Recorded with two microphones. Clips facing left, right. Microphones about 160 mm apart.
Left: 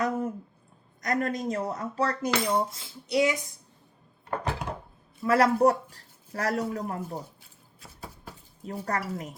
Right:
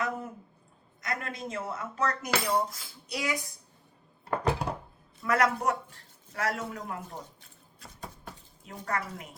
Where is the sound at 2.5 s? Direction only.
25° left (ahead or behind).